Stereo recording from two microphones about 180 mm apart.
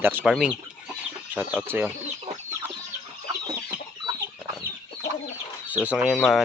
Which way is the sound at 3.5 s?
20° right (ahead or behind).